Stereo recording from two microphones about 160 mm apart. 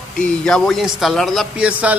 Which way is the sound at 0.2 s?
5° left (ahead or behind).